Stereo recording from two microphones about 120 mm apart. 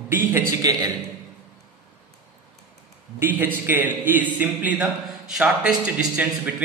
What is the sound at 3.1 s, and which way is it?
A man's voice, 15° right (ahead or behind).